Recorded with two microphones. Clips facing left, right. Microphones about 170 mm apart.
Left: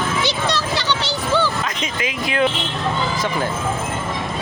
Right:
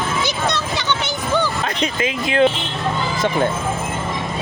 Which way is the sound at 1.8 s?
30° right (ahead or behind).